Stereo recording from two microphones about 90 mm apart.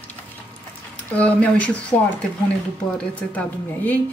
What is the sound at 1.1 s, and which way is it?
Speech, 15° left (ahead or behind).